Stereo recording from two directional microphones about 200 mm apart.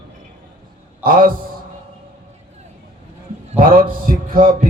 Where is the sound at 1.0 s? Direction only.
45° right (ahead or behind).